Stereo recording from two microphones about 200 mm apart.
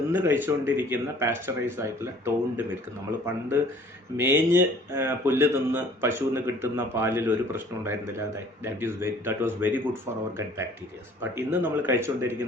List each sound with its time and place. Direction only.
0.1 s speech: 10° right (ahead or behind)
4.2 s speech: 10° right (ahead or behind)